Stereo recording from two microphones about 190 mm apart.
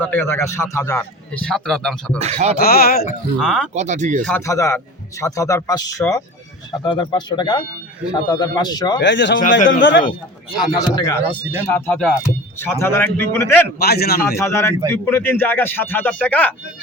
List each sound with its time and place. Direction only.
0.0 s a man's voice: 10° left (ahead or behind)
2.1 s speech: 35° right (ahead or behind)
2.6 s speech: 55° left (ahead or behind)
3.3 s speech: 5° left (ahead or behind)
3.8 s speech: 40° right (ahead or behind)
4.3 s a man's voice: 15° left (ahead or behind)
9.0 s speech: 70° left (ahead or behind)
9.4 s speech: 45° left (ahead or behind)
9.6 s speech: 75° left (ahead or behind)
10.8 s speech: 20° left (ahead or behind)
11.3 s speech: 10° right (ahead or behind)
11.7 s a man's voice: 5° left (ahead or behind)
13.7 s a man's voice: 55° left (ahead or behind)
14.3 s a man's voice: 15° left (ahead or behind)